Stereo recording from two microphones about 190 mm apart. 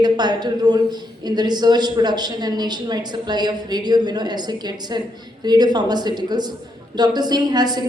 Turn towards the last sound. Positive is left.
turn(degrees=-20)  # may be behind; listen again after turning